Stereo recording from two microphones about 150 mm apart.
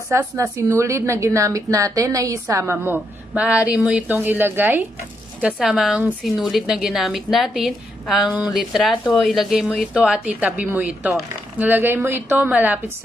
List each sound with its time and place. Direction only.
0.1 s a woman's voice: 20° right (ahead or behind)